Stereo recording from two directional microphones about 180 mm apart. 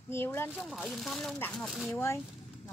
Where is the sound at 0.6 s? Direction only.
Centre (ahead or behind).